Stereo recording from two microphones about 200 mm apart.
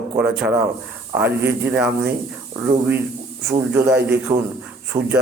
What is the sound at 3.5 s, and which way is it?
Speech, 10° right (ahead or behind).